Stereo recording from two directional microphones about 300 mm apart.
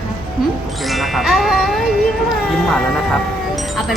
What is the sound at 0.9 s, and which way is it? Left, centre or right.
Music, centre.